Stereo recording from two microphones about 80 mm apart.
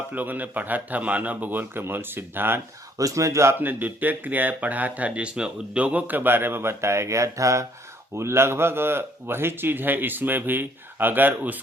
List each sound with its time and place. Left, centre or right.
0.1 s speech: right
3.0 s speech: right
3.6 s speech: right